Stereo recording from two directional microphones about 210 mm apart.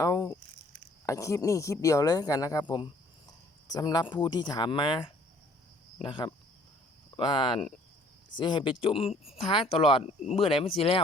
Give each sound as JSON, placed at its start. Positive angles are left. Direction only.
{"t": 0.0, "sound": "speech", "side_deg": 15}